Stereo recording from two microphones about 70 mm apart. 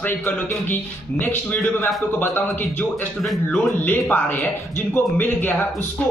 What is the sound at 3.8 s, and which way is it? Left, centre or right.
A man's voice, left.